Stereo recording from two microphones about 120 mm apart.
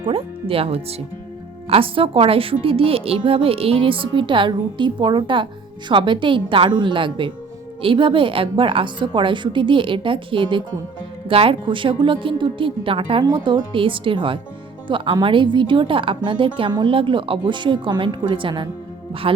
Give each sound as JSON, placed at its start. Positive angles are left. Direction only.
{"t": 0.1, "sound": "a woman's voice", "side_deg": -50}